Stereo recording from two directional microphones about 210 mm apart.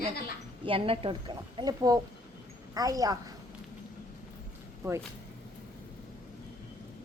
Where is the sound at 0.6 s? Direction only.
25° right (ahead or behind).